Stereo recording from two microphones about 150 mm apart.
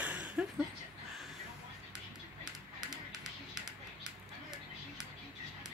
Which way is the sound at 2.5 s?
25° right (ahead or behind).